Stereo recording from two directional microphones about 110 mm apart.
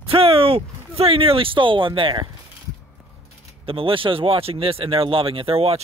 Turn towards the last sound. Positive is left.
turn(degrees=-60)  # may be behind; listen again after turning